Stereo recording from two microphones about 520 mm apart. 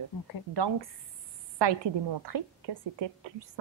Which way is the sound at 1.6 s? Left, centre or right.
Right.